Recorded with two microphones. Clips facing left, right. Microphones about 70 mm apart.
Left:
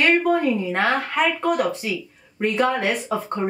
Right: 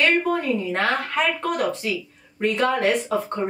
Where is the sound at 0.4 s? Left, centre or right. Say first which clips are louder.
Left 2 dB; centre.